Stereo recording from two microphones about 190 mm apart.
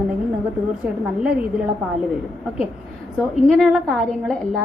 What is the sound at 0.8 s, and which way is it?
Speech, 5° right (ahead or behind).